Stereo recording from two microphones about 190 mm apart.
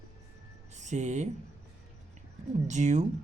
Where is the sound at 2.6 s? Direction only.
40° right (ahead or behind).